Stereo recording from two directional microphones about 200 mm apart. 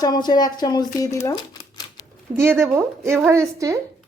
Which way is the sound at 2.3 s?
10° right (ahead or behind).